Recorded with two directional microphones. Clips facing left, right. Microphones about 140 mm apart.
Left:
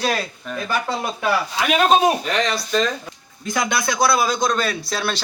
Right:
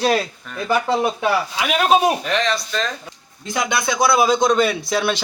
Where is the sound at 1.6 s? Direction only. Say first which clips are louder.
Left 1 dB; 5° right (ahead or behind).